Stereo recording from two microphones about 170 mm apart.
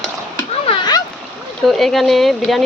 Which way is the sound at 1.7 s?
Centre (ahead or behind).